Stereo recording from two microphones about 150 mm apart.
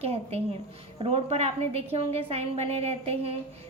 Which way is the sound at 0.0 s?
45° right (ahead or behind).